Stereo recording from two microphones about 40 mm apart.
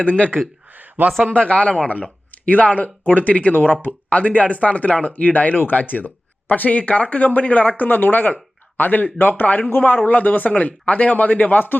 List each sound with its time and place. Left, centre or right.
0.0 s speech: left
0.7 s a sound: right
1.3 s speech: left
3.5 s speech: left
4.1 s speech: left
7.9 s speech: left